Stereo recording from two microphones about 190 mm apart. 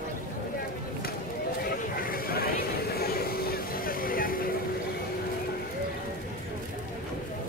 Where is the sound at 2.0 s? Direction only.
50° left (ahead or behind).